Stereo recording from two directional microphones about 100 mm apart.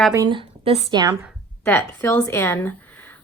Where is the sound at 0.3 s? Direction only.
65° right (ahead or behind); by 0.9 s 80° right.